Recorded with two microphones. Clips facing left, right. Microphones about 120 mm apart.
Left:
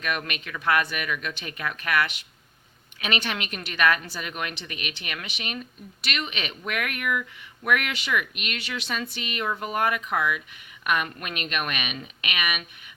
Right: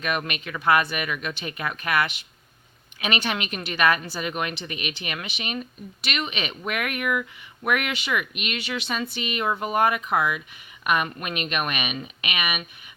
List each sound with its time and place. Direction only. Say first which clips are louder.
0.0 s speech: right 2 dB; 15° right (ahead or behind)
0.4 s speech: right 4 dB; 25° right (ahead or behind)
0.9 s speech: right 1 dB; 15° right (ahead or behind)
3.2 s speech: right 3 dB; 15° right (ahead or behind)